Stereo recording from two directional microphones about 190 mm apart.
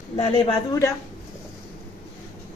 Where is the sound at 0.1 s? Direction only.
30° left (ahead or behind).